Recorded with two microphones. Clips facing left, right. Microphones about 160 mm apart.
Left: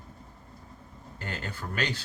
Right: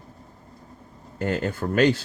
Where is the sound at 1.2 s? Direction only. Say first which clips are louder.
Right 12 dB; 45° right (ahead or behind).